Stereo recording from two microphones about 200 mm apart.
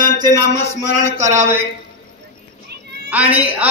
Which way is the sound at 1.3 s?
15° right (ahead or behind).